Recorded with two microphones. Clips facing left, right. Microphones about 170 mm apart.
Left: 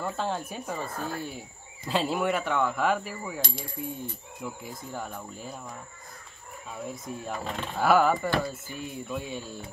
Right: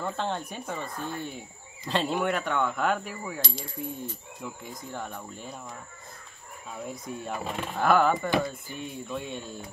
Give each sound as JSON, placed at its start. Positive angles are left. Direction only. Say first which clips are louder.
{"t": 0.0, "sound": "speech", "louder": "even", "side_deg": 5}
{"t": 0.7, "sound": "speech", "louder": "left 2 dB", "side_deg": 40}
{"t": 1.9, "sound": "speech", "louder": "even", "side_deg": 5}
{"t": 3.3, "sound": "coin", "louder": "left 1 dB", "side_deg": 50}
{"t": 4.4, "sound": "speech", "louder": "left 3 dB", "side_deg": 5}
{"t": 6.9, "sound": "speech", "louder": "right 1 dB", "side_deg": 0}
{"t": 7.7, "sound": "speech", "louder": "left 1 dB", "side_deg": 5}